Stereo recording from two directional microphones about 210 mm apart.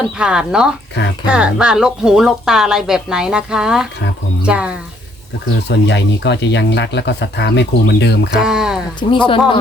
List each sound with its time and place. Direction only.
0.2 s a woman's voice: 5° right (ahead or behind)
5.6 s speech: 55° left (ahead or behind)
8.4 s speech: 5° right (ahead or behind)
9.0 s speech: 25° left (ahead or behind)